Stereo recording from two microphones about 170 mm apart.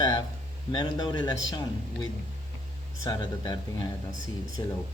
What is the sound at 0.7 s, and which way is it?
Speech, 25° left (ahead or behind).